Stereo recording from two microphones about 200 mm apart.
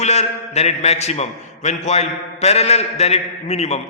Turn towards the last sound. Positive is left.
turn(degrees=35)  # may be behind; listen again after turning